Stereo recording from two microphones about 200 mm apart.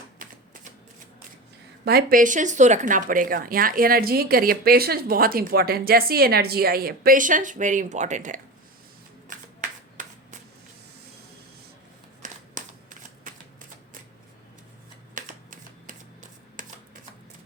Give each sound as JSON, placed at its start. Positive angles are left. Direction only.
{"t": 0.2, "sound": "typewriter", "side_deg": -45}
{"t": 1.8, "sound": "speech", "side_deg": -50}
{"t": 9.3, "sound": "shuffling cards", "side_deg": -40}
{"t": 12.2, "sound": "a sound", "side_deg": -40}
{"t": 15.1, "sound": "typewriter", "side_deg": -40}